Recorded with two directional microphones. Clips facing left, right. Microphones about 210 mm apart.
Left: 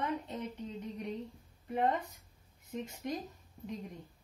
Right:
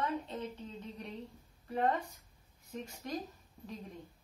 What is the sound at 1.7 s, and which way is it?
Speech, 20° left (ahead or behind).